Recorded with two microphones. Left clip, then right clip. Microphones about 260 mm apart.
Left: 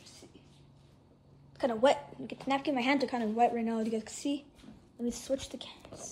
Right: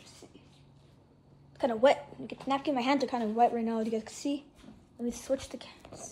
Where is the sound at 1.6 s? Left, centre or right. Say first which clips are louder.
Right 2 dB; centre.